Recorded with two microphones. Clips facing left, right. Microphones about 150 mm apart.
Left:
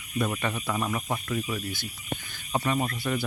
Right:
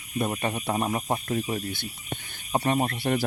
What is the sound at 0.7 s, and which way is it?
Speech, 30° right (ahead or behind).